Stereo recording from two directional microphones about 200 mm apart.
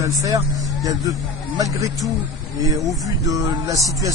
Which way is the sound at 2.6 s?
20° right (ahead or behind).